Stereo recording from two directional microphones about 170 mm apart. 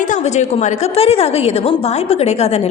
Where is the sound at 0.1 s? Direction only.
45° left (ahead or behind).